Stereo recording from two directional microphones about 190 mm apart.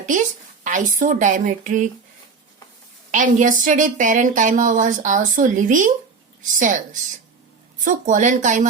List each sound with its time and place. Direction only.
0.0 s a woman's voice: 40° right (ahead or behind)
3.1 s a woman's voice: 40° right (ahead or behind)
7.9 s a woman's voice: 40° right (ahead or behind)